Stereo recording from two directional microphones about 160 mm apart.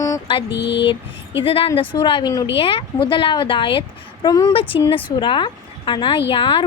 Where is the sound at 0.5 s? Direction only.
90° left.